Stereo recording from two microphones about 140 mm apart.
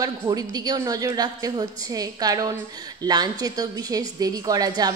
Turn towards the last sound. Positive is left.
turn(degrees=-25)  # may be behind; listen again after turning